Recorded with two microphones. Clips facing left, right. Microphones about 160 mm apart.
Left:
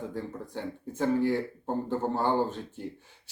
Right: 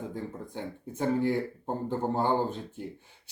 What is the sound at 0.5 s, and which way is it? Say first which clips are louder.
Speech: left 2 dB; 15° right (ahead or behind).